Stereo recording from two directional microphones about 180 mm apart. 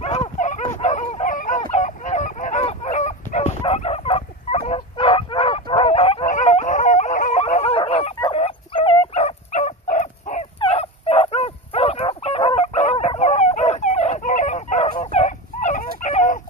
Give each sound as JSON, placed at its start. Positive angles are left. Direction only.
{"t": 0.0, "sound": "dog", "side_deg": 35}
{"t": 1.7, "sound": "fowl", "side_deg": 40}
{"t": 6.2, "sound": "dog", "side_deg": 45}
{"t": 15.0, "sound": "fowl", "side_deg": 40}